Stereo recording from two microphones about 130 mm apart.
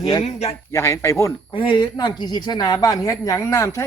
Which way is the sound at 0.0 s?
30° left (ahead or behind).